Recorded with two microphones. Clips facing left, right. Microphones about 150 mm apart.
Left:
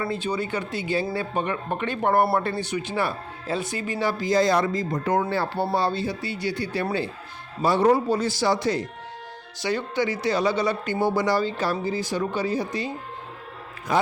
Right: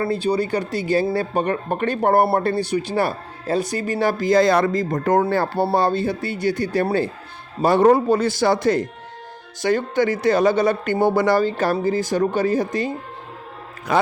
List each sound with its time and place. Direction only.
0.0 s speech: 35° right (ahead or behind)
3.9 s speech: 50° right (ahead or behind)
13.9 s speech: 70° right (ahead or behind)